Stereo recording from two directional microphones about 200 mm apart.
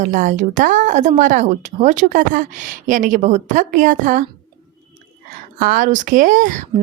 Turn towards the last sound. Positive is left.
turn(degrees=-40)  # may be behind; listen again after turning